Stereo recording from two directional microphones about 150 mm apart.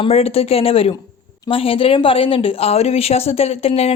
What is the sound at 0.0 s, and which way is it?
A woman's voice, 40° left (ahead or behind).